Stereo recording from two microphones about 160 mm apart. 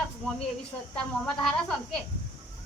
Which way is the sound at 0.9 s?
5° left (ahead or behind).